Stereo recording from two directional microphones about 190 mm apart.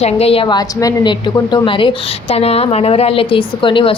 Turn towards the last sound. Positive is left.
turn(degrees=25)  # may be behind; listen again after turning